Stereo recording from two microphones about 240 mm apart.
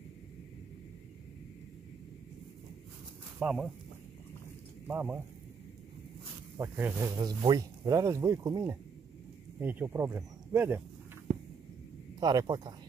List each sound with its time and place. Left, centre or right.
3.3 s speech: centre
4.8 s speech: centre
6.6 s speech: centre
12.2 s speech: centre